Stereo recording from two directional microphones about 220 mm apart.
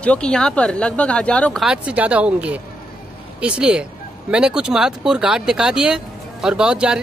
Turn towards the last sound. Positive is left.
turn(degrees=-5)  # may be behind; listen again after turning